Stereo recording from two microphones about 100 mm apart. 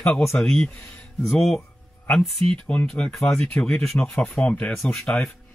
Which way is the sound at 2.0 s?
5° left (ahead or behind).